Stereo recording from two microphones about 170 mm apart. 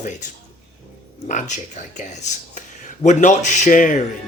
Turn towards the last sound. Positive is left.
turn(degrees=50)  # may be behind; listen again after turning